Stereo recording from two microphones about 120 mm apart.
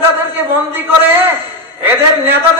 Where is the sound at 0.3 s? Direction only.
15° right (ahead or behind).